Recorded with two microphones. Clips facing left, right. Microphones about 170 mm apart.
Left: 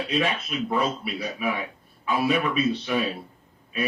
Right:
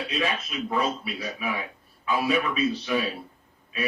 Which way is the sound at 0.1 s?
30° left (ahead or behind).